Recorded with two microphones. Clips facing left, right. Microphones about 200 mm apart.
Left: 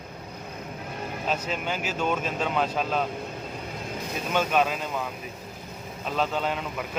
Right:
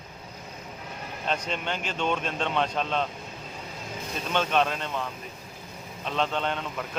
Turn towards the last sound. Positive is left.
turn(degrees=5)  # may be behind; listen again after turning